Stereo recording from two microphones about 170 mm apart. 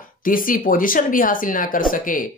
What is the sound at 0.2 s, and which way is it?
Speech, 55° left (ahead or behind).